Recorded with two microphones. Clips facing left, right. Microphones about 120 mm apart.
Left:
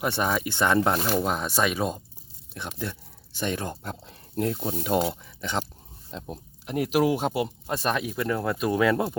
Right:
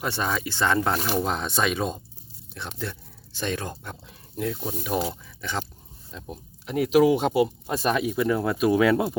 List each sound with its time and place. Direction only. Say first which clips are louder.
0.0 s speech: left 2 dB; 15° left (ahead or behind)
3.8 s speech: left 3 dB; 35° left (ahead or behind)
4.8 s speech: left 3 dB; 20° left (ahead or behind)
6.1 s speech: left 2 dB; 30° left (ahead or behind)
6.7 s speech: right 4 dB; 5° left (ahead or behind)